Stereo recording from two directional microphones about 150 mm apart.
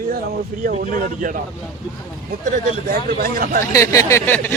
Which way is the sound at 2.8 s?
70° right (ahead or behind).